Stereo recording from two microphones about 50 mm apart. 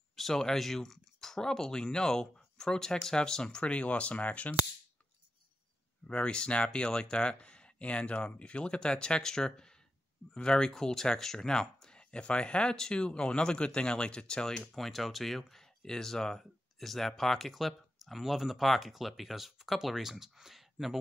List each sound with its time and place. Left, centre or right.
0.1 s speech: centre; by 4.6 s left
6.0 s speech: left
14.7 s speech: centre